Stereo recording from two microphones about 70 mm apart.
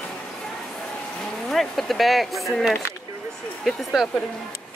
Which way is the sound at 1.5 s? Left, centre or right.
Centre.